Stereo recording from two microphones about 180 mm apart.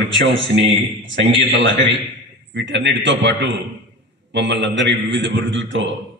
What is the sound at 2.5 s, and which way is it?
A man's voice, 80° right.